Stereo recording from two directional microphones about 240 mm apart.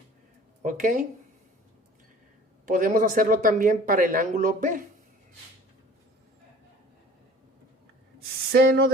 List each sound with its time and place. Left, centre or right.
0.6 s speech: right
2.6 s speech: right
8.2 s a sound: right